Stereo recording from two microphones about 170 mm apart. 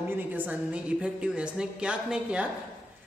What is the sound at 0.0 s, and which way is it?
A woman's voice, 10° right (ahead or behind).